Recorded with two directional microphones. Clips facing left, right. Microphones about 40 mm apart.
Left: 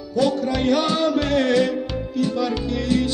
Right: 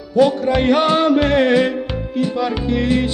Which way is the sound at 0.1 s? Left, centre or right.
Right.